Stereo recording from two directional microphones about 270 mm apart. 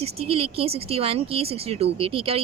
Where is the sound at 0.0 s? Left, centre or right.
Right.